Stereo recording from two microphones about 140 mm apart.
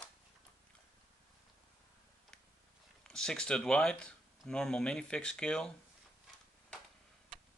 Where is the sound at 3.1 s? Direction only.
5° left (ahead or behind).